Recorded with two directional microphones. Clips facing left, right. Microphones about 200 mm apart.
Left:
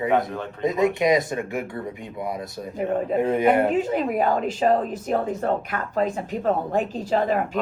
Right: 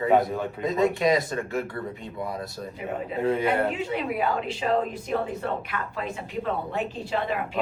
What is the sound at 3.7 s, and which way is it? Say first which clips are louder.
A woman's voice: left 6 dB; 45° left (ahead or behind).